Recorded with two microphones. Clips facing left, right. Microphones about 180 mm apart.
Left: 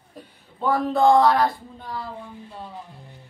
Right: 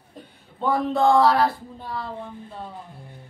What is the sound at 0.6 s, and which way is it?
Speech, centre (ahead or behind).